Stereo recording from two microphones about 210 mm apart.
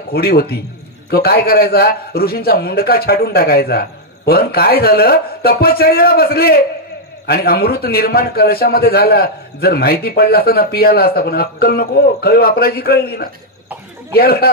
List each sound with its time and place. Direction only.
0.1 s a man's voice: 45° left (ahead or behind)